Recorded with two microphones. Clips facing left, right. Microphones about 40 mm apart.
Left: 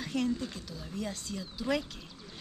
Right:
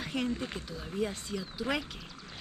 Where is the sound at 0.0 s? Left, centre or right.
Right.